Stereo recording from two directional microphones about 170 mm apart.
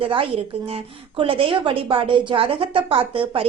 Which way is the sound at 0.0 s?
30° right (ahead or behind).